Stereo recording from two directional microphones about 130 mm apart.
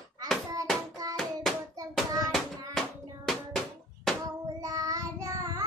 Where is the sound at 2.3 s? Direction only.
Centre (ahead or behind).